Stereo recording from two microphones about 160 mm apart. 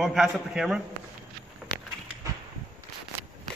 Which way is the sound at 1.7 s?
70° left (ahead or behind).